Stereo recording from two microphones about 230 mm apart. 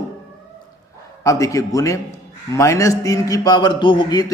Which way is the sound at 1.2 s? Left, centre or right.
Centre.